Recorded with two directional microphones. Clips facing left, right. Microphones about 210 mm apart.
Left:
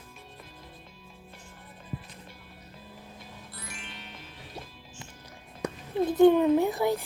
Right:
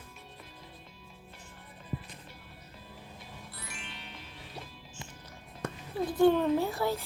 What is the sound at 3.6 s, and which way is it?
Music, 50° left (ahead or behind).